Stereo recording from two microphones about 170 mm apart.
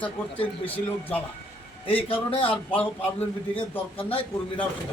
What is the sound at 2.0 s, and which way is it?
Speech, 35° left (ahead or behind).